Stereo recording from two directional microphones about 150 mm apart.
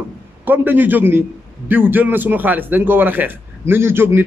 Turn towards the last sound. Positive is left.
turn(degrees=-15)  # may be behind; listen again after turning